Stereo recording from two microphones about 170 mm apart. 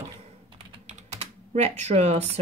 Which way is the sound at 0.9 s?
40° right (ahead or behind).